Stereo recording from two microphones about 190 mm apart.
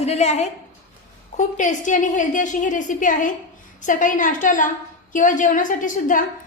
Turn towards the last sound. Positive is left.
turn(degrees=45)  # may be behind; listen again after turning